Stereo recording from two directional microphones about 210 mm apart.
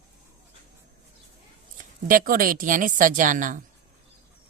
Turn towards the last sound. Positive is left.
turn(degrees=-40)  # may be behind; listen again after turning